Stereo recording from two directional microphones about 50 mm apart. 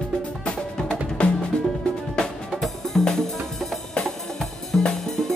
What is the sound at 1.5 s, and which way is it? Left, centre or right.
Music, centre.